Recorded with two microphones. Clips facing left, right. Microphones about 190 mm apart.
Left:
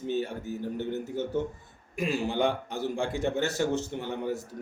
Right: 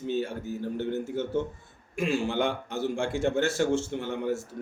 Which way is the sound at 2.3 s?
15° left (ahead or behind).